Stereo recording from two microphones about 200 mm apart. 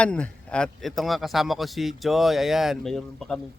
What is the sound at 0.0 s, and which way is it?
Speech, 5° left (ahead or behind).